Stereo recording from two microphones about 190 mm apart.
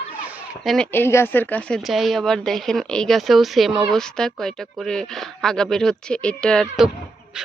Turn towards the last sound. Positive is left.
turn(degrees=0)  # may be behind; listen again after turning